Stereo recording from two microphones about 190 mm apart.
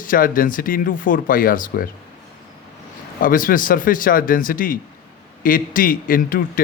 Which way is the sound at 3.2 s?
45° left (ahead or behind).